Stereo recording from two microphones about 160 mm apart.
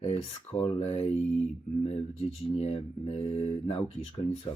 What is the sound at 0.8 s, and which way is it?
Speech, 35° left (ahead or behind).